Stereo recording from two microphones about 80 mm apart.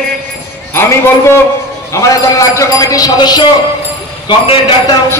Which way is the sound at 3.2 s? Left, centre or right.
Left.